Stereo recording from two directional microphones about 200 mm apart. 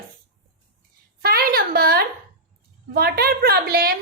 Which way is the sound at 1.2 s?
50° right (ahead or behind).